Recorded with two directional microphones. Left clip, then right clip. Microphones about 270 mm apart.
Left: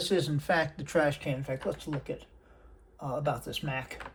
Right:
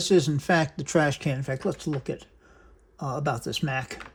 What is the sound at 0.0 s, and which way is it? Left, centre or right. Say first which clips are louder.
Speech: right 7 dB; right.